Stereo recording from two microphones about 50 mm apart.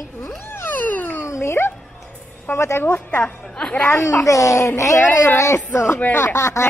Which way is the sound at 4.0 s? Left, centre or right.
Left.